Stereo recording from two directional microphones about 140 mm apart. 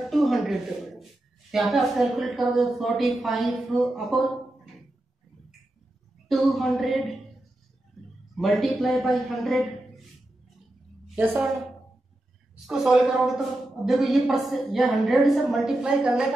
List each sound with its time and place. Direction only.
0.1 s a sound: centre (ahead or behind)
1.5 s a woman's voice: centre (ahead or behind)
6.2 s a woman's voice: centre (ahead or behind)
8.4 s a woman's voice: centre (ahead or behind)
11.1 s a woman's voice: 10° right (ahead or behind)
12.6 s a woman's voice: 5° right (ahead or behind)